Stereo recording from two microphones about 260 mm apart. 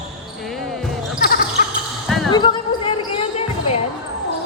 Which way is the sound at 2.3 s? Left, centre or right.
Centre.